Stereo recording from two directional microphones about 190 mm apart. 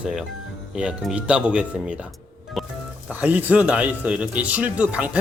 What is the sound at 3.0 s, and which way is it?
Speech, 10° right (ahead or behind).